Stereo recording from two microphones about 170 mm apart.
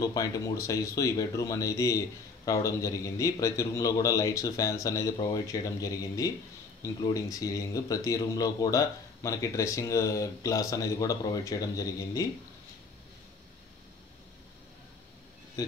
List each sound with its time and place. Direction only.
0.0 s speech: 20° left (ahead or behind)